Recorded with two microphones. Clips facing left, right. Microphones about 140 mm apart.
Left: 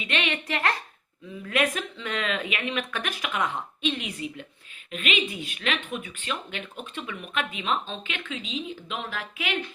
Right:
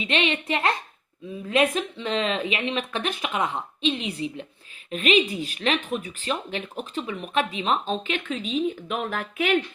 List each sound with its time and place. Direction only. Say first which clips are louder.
0.0 s speech: right 4 dB; 25° right (ahead or behind)
4.9 s speech: right 7 dB; 35° right (ahead or behind); by 9.6 s 55° right (ahead or behind)